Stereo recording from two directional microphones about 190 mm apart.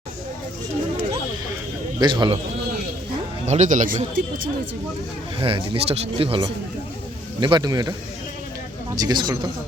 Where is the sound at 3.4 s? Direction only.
35° right (ahead or behind).